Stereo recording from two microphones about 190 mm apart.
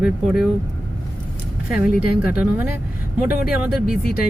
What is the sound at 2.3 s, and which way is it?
Speech, 5° right (ahead or behind).